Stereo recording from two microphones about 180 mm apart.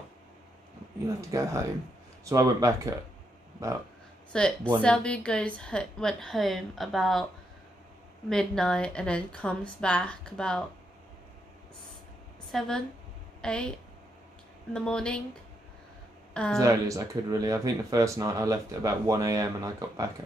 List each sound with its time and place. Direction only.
1.0 s speech: 15° right (ahead or behind)
4.3 s a woman's voice: 5° left (ahead or behind)
8.3 s a woman's voice: 5° left (ahead or behind)
12.4 s a woman's voice: centre (ahead or behind)
16.5 s speech: 15° right (ahead or behind)